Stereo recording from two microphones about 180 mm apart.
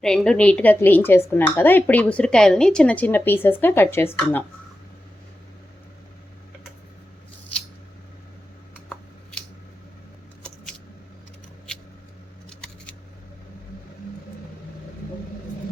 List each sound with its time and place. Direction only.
0.0 s speech: 5° left (ahead or behind)
7.5 s scissors: 10° left (ahead or behind)
12.5 s scissors: 5° left (ahead or behind)